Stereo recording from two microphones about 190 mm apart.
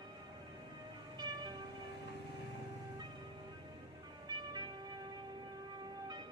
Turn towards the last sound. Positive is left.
turn(degrees=-20)  # may be behind; listen again after turning